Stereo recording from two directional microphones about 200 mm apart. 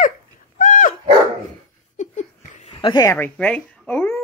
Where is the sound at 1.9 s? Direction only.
35° left (ahead or behind).